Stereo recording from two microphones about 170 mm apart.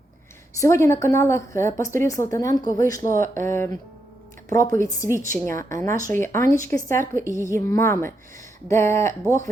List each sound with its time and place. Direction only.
0.6 s a woman's voice: 15° left (ahead or behind)
3.1 s speech: 50° right (ahead or behind)
3.4 s a woman's voice: 15° left (ahead or behind)
5.0 s speech: 50° right (ahead or behind)
5.5 s a woman's voice: 20° left (ahead or behind)